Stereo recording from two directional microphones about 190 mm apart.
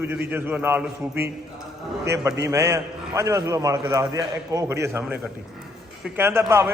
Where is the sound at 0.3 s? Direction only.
10° right (ahead or behind).